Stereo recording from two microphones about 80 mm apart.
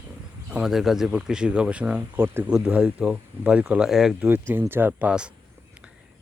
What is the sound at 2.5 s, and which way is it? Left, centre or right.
Speech, centre.